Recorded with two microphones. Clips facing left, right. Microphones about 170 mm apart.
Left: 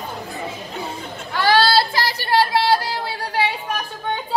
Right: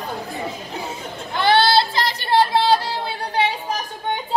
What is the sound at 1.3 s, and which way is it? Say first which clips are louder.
Child singing: even; 20° right (ahead or behind).